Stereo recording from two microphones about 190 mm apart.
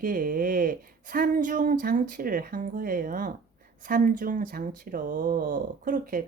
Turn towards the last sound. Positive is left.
turn(degrees=-45)  # may be behind; listen again after turning